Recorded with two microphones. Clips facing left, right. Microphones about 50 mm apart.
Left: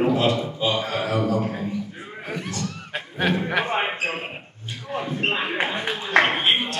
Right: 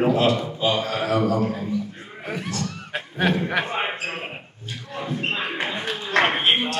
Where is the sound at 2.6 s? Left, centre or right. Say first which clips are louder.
Right 1 dB; centre.